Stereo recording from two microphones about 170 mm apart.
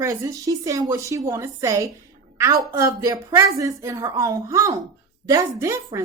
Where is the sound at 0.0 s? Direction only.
20° right (ahead or behind).